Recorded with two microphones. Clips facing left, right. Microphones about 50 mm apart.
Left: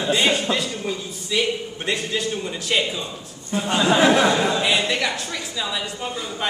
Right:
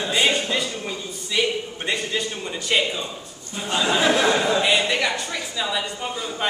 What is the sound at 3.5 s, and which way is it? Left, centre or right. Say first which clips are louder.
Speech: left 7 dB; left.